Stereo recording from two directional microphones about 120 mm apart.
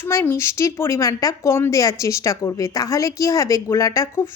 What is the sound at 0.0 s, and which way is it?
A woman's voice, 20° left (ahead or behind).